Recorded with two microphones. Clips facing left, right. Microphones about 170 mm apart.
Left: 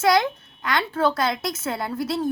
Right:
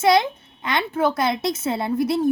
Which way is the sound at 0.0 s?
20° right (ahead or behind).